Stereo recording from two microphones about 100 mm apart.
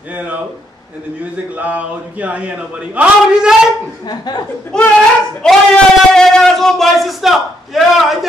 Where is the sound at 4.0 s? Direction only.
45° left (ahead or behind).